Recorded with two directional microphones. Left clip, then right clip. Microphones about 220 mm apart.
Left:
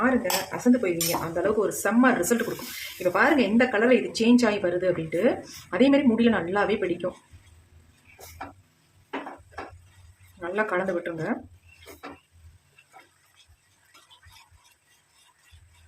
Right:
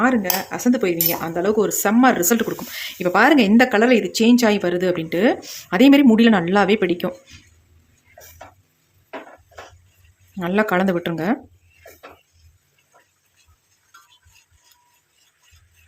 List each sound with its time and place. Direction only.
0.0 s speech: 45° right (ahead or behind)
10.4 s speech: 45° right (ahead or behind)